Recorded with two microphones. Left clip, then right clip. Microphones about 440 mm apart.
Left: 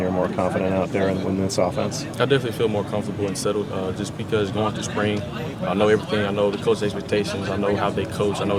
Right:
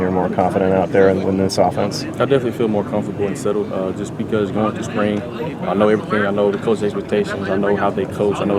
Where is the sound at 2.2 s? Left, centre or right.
Left.